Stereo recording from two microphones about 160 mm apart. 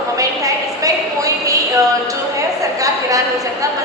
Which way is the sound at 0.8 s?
20° right (ahead or behind).